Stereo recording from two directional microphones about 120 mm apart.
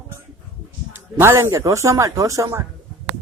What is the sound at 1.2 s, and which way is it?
Speech, 20° right (ahead or behind).